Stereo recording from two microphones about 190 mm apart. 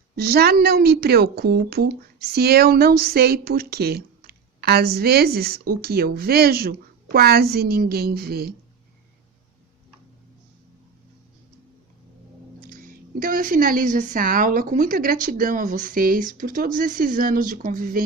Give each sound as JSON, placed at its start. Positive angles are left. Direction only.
{"t": 0.2, "sound": "a woman's voice", "side_deg": -55}
{"t": 12.6, "sound": "a woman's voice", "side_deg": -50}